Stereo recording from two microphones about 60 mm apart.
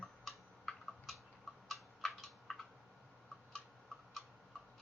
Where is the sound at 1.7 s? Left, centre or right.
Centre.